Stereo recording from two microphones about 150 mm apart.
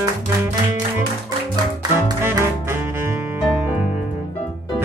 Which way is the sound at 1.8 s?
25° right (ahead or behind).